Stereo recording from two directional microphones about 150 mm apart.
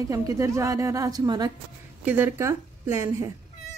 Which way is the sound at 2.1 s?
15° right (ahead or behind).